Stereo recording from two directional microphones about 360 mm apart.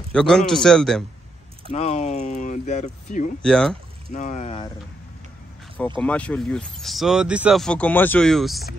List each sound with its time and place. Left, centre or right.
0.1 s speech: centre
1.7 s speech: centre
3.4 s speech: centre
4.1 s speech: centre
5.9 s speech: centre